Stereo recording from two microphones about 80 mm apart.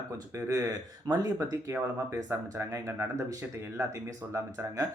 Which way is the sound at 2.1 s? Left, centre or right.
Right.